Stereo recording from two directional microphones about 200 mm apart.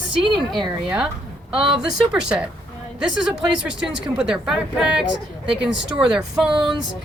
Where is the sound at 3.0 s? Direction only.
5° right (ahead or behind).